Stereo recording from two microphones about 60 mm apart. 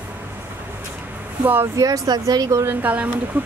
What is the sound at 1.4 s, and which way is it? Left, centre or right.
Speech, right.